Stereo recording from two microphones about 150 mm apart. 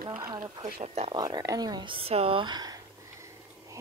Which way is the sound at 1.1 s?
25° right (ahead or behind).